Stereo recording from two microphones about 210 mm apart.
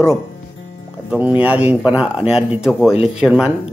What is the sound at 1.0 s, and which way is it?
Speech, 5° right (ahead or behind).